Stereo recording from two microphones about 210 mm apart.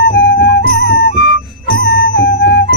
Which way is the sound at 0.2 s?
50° left (ahead or behind).